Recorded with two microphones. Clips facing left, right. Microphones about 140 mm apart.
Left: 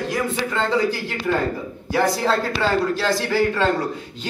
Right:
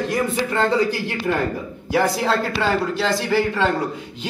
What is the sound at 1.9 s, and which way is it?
A woman's voice, 15° right (ahead or behind).